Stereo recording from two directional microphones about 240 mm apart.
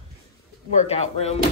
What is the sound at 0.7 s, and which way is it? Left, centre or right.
Speech, left.